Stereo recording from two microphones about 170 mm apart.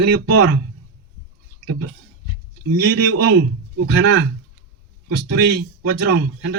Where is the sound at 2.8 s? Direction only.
85° right.